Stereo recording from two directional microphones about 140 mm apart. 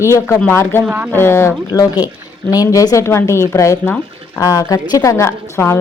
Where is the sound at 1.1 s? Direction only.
15° left (ahead or behind).